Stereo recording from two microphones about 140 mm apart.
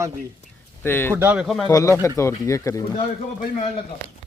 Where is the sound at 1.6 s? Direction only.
20° left (ahead or behind).